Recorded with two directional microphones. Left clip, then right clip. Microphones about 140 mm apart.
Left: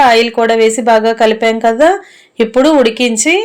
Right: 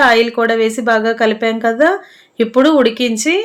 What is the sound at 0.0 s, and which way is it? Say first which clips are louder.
Speech: left 3 dB; 20° left (ahead or behind).